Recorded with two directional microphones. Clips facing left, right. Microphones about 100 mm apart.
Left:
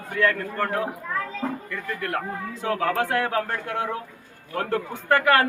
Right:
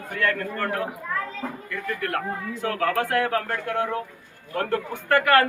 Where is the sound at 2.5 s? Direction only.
25° left (ahead or behind).